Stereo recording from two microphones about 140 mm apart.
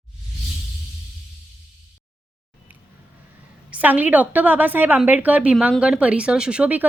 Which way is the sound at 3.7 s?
10° right (ahead or behind).